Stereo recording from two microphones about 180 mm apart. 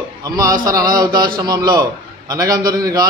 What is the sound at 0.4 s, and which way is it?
A man's voice, 20° right (ahead or behind).